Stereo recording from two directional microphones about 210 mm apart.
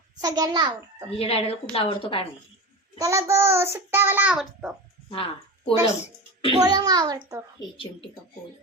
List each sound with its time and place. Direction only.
0.2 s a child's voice: 15° right (ahead or behind)
1.2 s speech: 30° left (ahead or behind)
3.0 s a child's voice: 15° right (ahead or behind)
5.0 s a sound: 25° left (ahead or behind)
6.5 s a child's voice: 20° right (ahead or behind)